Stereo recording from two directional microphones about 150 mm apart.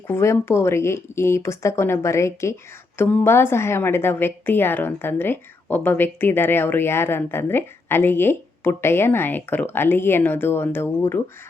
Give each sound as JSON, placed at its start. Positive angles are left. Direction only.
{"t": 0.1, "sound": "a woman's voice", "side_deg": 15}